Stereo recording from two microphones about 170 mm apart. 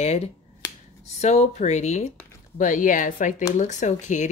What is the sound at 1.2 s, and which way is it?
A woman's voice, 40° left (ahead or behind).